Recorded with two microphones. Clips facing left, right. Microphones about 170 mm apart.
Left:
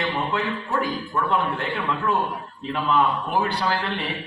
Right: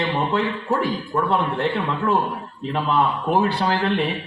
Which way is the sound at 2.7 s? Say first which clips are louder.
Right 1 dB; 35° right (ahead or behind).